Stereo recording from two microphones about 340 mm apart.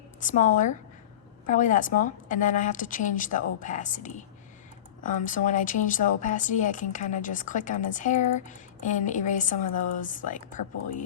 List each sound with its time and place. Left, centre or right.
0.2 s a woman's voice: left